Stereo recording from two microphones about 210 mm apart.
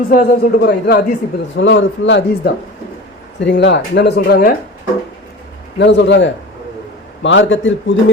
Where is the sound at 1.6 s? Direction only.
65° left (ahead or behind); by 4.5 s 45° left (ahead or behind).